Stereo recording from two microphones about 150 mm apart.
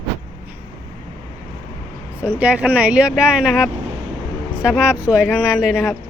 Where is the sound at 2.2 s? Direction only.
10° right (ahead or behind).